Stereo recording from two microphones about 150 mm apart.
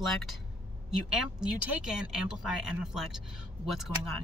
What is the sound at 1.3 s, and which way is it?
Speech, 5° right (ahead or behind).